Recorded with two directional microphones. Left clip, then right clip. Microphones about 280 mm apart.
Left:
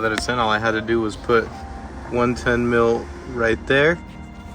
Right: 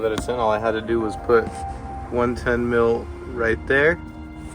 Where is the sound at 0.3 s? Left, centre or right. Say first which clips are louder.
Even; left.